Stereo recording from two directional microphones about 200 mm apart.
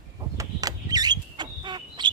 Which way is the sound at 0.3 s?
20° right (ahead or behind).